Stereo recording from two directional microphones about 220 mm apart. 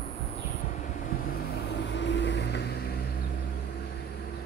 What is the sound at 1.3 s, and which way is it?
Vehicle, 45° left (ahead or behind).